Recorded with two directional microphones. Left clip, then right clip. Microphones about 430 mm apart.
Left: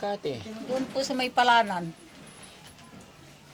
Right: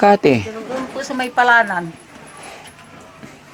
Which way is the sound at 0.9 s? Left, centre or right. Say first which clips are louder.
Right 8 dB; left.